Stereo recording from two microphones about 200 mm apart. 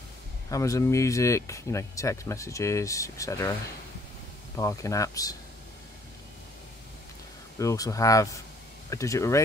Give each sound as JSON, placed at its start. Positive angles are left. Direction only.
{"t": 0.5, "sound": "speech", "side_deg": 15}
{"t": 4.6, "sound": "speech", "side_deg": 15}
{"t": 7.5, "sound": "speech", "side_deg": 15}